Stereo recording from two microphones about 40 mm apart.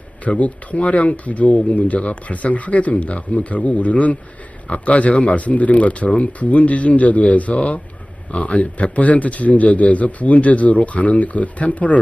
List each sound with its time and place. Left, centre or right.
0.3 s speech: left